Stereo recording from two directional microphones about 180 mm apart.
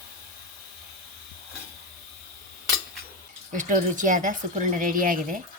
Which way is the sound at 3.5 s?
45° right (ahead or behind).